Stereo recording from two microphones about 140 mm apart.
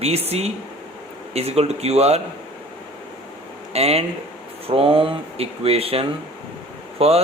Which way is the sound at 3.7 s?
50° right (ahead or behind).